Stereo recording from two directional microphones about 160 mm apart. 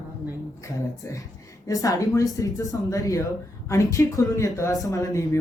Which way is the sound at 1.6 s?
20° left (ahead or behind).